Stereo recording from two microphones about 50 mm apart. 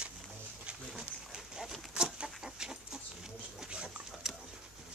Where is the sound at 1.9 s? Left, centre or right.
Centre.